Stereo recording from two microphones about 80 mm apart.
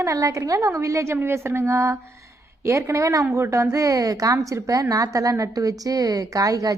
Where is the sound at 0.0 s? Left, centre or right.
Right.